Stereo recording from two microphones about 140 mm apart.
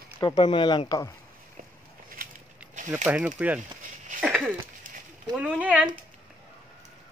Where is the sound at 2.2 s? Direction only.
90° right.